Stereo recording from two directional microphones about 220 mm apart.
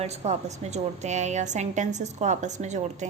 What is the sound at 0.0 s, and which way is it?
A woman's voice, 30° right (ahead or behind).